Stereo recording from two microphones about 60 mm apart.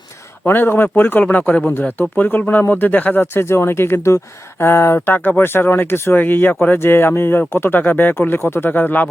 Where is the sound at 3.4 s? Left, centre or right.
Left.